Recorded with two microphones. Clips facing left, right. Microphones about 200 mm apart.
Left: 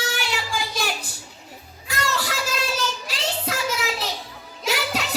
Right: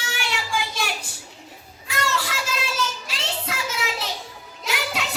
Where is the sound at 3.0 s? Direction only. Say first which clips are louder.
Left 3 dB; 40° left (ahead or behind).